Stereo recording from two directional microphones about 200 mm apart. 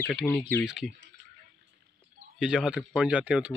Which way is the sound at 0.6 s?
Centre (ahead or behind).